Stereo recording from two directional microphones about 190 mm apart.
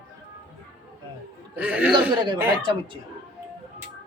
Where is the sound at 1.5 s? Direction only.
10° right (ahead or behind).